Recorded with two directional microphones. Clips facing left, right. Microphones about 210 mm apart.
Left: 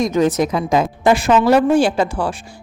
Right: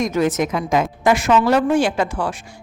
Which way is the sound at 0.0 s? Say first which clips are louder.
Left 3 dB; 35° left (ahead or behind).